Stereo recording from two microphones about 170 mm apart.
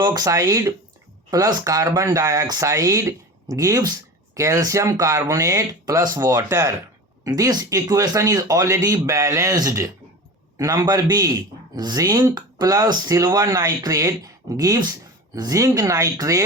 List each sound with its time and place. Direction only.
0.0 s speech: 20° right (ahead or behind)